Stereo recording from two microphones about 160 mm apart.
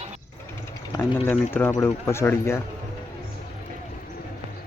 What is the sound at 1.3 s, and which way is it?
Speech, 15° left (ahead or behind).